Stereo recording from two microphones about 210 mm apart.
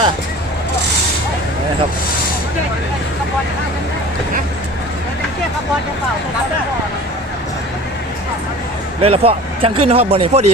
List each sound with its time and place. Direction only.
9.0 s speech: 30° right (ahead or behind)